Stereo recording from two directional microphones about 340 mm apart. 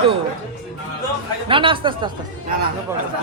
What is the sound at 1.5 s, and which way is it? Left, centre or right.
Speech, centre.